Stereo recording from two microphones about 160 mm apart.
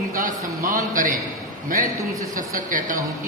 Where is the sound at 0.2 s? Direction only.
60° right (ahead or behind).